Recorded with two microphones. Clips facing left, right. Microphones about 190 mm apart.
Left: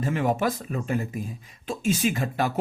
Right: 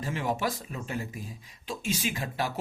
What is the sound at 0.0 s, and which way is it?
Speech, 55° left (ahead or behind).